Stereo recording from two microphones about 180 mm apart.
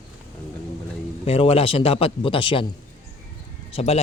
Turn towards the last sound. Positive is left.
turn(degrees=35)  # may be behind; listen again after turning